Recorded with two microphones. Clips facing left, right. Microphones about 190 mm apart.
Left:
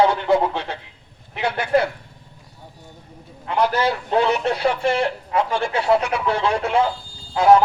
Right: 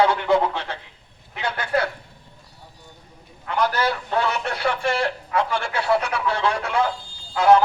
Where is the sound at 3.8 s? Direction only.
15° left (ahead or behind).